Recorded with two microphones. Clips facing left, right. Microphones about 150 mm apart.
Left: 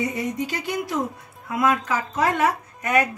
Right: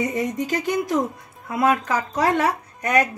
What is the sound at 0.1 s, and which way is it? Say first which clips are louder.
Speech: right 3 dB; 45° right (ahead or behind).